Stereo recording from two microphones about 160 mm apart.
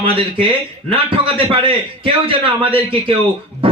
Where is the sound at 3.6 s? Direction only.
35° right (ahead or behind).